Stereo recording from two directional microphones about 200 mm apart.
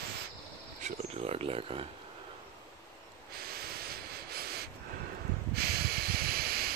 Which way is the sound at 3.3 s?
50° right (ahead or behind).